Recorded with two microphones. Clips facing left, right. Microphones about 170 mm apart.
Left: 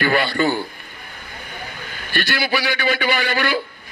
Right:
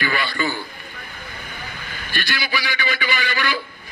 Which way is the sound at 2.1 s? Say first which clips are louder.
Left 5 dB; 55° left (ahead or behind).